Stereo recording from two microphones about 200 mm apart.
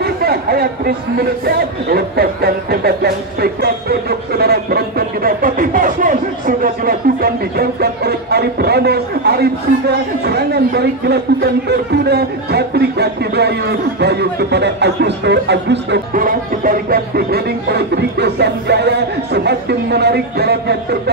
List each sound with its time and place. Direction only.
0.0 s speech: 50° right (ahead or behind)